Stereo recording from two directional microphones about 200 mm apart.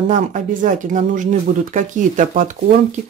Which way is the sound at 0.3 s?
40° right (ahead or behind).